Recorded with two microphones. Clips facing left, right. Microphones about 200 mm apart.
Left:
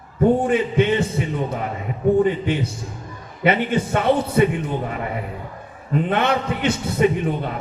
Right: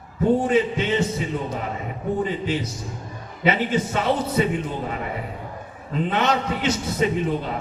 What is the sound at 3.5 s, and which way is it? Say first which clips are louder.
A man's voice: left 2 dB; 55° left (ahead or behind).